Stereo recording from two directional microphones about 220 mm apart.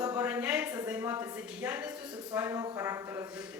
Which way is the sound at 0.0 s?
10° right (ahead or behind).